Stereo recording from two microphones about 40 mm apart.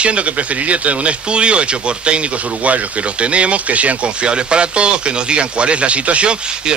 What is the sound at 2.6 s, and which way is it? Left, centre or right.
Speech, right.